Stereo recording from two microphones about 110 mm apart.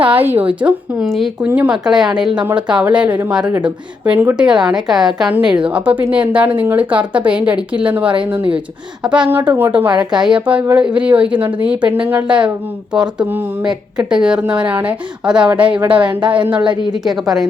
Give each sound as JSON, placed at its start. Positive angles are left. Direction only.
{"t": 0.4, "sound": "a woman's voice", "side_deg": -10}
{"t": 1.4, "sound": "a woman's voice", "side_deg": -10}
{"t": 4.4, "sound": "a woman's voice", "side_deg": -5}
{"t": 9.1, "sound": "a woman's voice", "side_deg": -15}
{"t": 15.9, "sound": "a woman's voice", "side_deg": -45}